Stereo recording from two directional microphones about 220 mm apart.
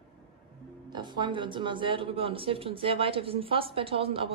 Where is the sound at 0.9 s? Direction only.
20° right (ahead or behind).